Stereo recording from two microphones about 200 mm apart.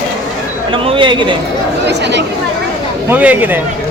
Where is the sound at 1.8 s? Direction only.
60° right (ahead or behind).